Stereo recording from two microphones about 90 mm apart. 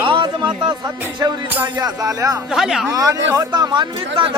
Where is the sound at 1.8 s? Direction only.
45° right (ahead or behind).